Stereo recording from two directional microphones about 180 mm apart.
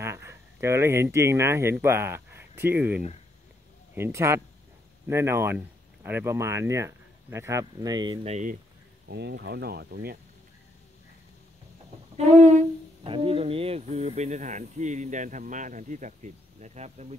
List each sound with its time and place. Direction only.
0.0 s speech: 15° right (ahead or behind); by 8.5 s 40° right (ahead or behind)
9.0 s speech: 65° right (ahead or behind)
12.2 s speech: 40° right (ahead or behind)